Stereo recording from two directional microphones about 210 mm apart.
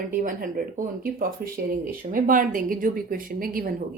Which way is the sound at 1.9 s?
40° right (ahead or behind).